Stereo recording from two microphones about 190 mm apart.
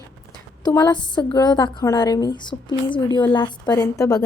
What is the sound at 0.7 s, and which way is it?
A woman's voice, 20° left (ahead or behind).